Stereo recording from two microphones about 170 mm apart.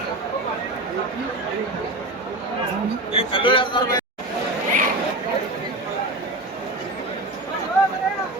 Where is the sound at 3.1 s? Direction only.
30° left (ahead or behind).